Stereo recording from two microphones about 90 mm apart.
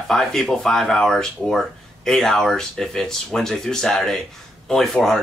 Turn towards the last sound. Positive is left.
turn(degrees=5)  # may be behind; listen again after turning